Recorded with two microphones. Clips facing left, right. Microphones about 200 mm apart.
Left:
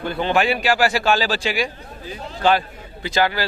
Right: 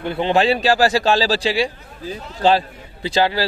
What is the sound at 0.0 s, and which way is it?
Cattle, 25° right (ahead or behind).